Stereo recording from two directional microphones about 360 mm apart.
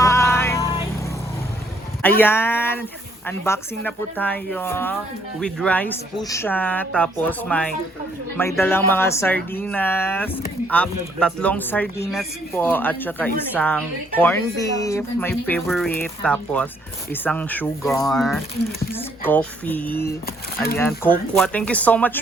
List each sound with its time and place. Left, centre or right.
0.0 s vehicle: centre
2.0 s speech: centre